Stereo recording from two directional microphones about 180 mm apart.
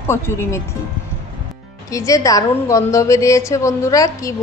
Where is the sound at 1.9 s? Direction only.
20° left (ahead or behind).